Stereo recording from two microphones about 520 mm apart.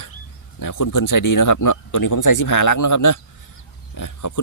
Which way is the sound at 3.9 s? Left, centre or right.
Left.